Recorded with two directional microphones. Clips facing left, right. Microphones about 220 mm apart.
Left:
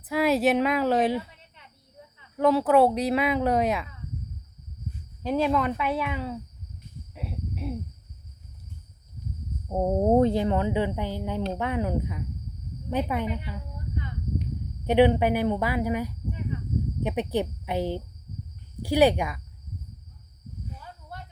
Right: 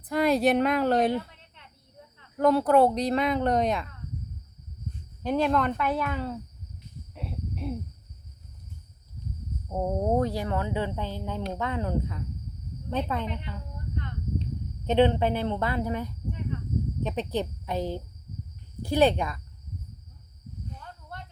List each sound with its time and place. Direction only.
0.0 s a woman's voice: 5° left (ahead or behind)
7.1 s a sound: 5° left (ahead or behind)
9.6 s speech: 20° left (ahead or behind)
12.9 s a sound: 10° left (ahead or behind)
14.8 s a woman's voice: 10° left (ahead or behind)
20.7 s snake: 5° left (ahead or behind)